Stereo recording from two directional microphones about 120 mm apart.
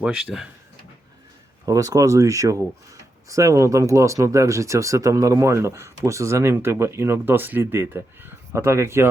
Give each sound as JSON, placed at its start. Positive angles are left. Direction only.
{"t": 0.0, "sound": "speech", "side_deg": -10}
{"t": 1.6, "sound": "speech", "side_deg": -30}